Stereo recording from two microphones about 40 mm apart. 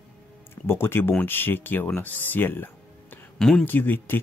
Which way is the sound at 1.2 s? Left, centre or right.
Left.